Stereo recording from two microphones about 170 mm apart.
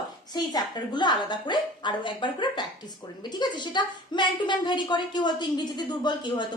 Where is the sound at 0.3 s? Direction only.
25° left (ahead or behind).